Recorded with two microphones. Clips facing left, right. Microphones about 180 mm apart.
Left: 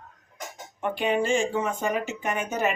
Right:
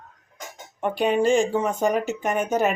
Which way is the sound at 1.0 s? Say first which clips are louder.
Right 5 dB; 40° right (ahead or behind).